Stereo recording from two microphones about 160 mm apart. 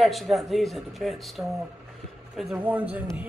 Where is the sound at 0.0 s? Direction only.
Centre (ahead or behind).